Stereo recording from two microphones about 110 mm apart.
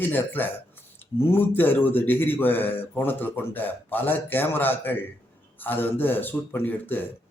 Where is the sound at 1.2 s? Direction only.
20° left (ahead or behind).